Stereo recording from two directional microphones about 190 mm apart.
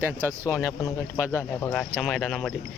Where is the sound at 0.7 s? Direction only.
15° left (ahead or behind).